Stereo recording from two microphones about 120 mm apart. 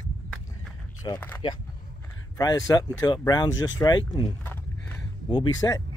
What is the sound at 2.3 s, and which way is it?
Speech, 30° left (ahead or behind).